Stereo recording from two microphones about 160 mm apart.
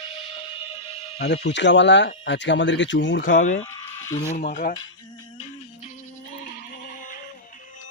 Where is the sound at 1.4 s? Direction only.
90° left.